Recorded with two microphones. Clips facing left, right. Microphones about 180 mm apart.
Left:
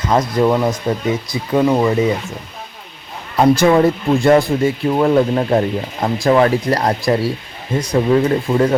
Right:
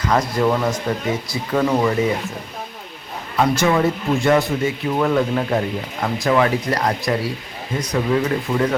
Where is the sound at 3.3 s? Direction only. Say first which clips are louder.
Left 6 dB; 30° left (ahead or behind).